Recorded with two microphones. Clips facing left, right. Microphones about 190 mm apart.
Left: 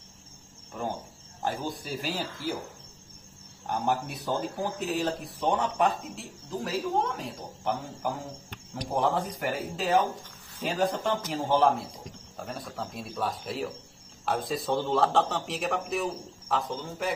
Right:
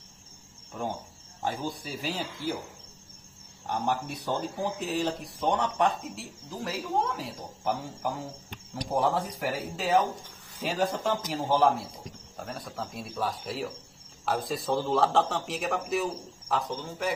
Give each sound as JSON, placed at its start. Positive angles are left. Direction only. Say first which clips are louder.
{"t": 0.7, "sound": "speech", "louder": "even", "side_deg": 5}
{"t": 3.6, "sound": "speech", "louder": "left 1 dB", "side_deg": 0}